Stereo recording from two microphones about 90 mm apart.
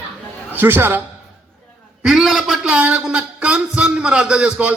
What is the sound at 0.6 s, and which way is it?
Speech, 25° right (ahead or behind).